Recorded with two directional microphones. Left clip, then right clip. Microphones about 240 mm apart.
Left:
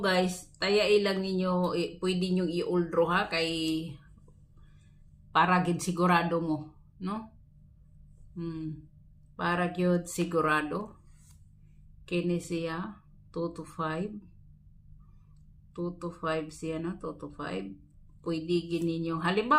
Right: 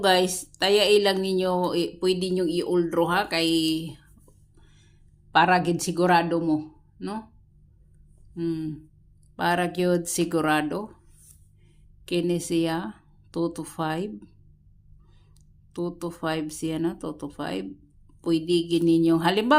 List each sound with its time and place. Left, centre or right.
0.0 s a woman's voice: right
5.3 s a woman's voice: right
8.4 s a woman's voice: right
12.0 s a woman's voice: right
15.7 s a woman's voice: right